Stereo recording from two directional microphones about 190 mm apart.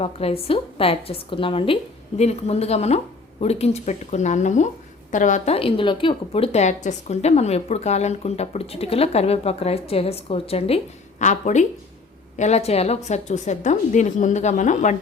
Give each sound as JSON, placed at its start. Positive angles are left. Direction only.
{"t": 0.0, "sound": "a woman's voice", "side_deg": 30}